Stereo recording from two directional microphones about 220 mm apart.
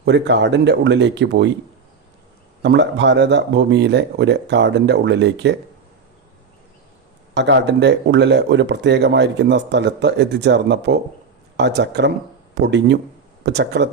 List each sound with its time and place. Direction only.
0.0 s speech: 50° right (ahead or behind)
2.6 s speech: 50° right (ahead or behind)
7.3 s speech: 50° right (ahead or behind)